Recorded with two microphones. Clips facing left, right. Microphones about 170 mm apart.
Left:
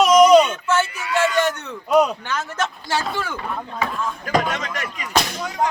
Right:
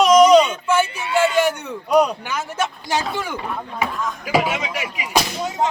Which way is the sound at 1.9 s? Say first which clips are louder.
Even; centre (ahead or behind).